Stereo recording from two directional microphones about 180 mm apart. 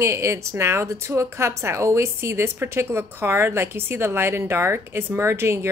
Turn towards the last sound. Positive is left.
turn(degrees=-15)  # may be behind; listen again after turning